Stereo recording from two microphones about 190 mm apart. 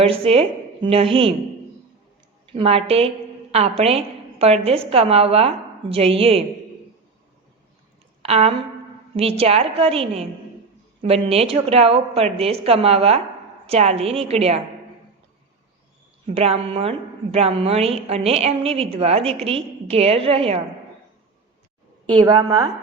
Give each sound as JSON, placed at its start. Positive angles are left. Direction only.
{"t": 0.0, "sound": "a woman's voice", "side_deg": -30}
{"t": 2.5, "sound": "a woman's voice", "side_deg": -30}
{"t": 8.2, "sound": "a sound", "side_deg": -30}
{"t": 9.1, "sound": "a woman's voice", "side_deg": -30}
{"t": 16.2, "sound": "a woman's voice", "side_deg": -30}
{"t": 22.2, "sound": "a woman's voice", "side_deg": -20}